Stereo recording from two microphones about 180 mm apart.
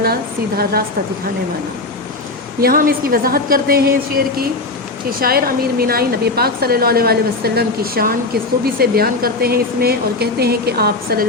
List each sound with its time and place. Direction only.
0.0 s a woman's voice: 60° right (ahead or behind)
2.6 s a woman's voice: 55° right (ahead or behind)